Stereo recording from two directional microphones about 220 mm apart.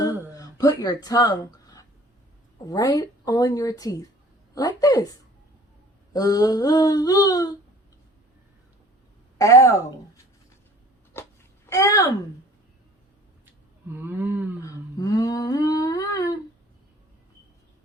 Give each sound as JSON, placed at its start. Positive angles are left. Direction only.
{"t": 0.0, "sound": "music", "side_deg": 15}
{"t": 2.6, "sound": "a woman's voice", "side_deg": 15}
{"t": 6.1, "sound": "a woman's voice", "side_deg": 15}
{"t": 9.4, "sound": "a woman's voice", "side_deg": 15}
{"t": 11.1, "sound": "wail", "side_deg": 10}
{"t": 13.4, "sound": "a sound", "side_deg": -10}
{"t": 14.6, "sound": "humming", "side_deg": 15}